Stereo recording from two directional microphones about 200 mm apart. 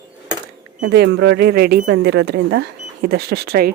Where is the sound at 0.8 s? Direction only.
55° right (ahead or behind).